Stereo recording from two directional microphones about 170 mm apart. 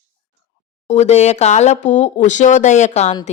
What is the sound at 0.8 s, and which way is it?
A woman's voice, 40° left (ahead or behind).